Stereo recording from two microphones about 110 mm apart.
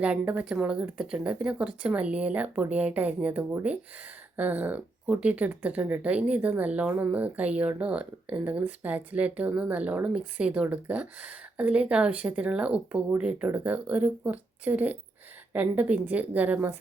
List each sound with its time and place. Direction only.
0.0 s speech: 10° right (ahead or behind)